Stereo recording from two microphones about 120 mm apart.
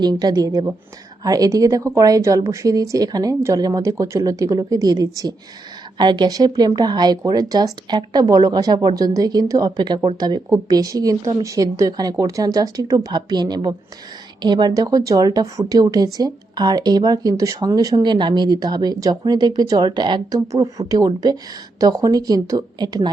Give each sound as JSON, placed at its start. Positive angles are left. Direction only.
{"t": 0.0, "sound": "a woman's voice", "side_deg": -35}